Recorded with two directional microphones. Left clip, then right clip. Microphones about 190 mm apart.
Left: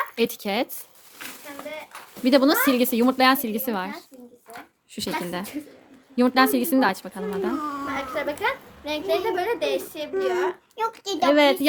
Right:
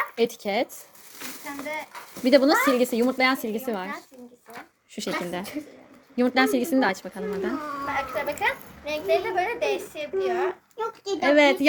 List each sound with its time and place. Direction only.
0.2 s a child's voice: 20° left (ahead or behind)
2.2 s a child's voice: 20° left (ahead or behind)
4.9 s a woman's voice: 15° left (ahead or behind)
10.8 s a child's voice: 45° left (ahead or behind)
11.3 s a woman's voice: 10° left (ahead or behind)